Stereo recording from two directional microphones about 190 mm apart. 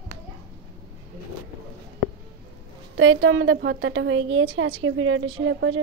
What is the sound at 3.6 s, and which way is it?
A woman's voice, 70° right (ahead or behind).